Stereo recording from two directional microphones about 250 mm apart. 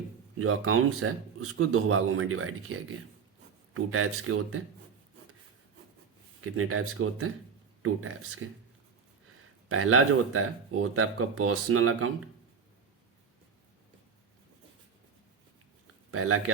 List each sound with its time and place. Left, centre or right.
0.3 s speech: right
6.4 s speech: right
8.4 s speech: right
9.6 s speech: right
16.1 s speech: right